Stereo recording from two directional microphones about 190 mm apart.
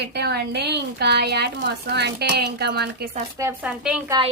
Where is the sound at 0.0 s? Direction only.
60° right (ahead or behind).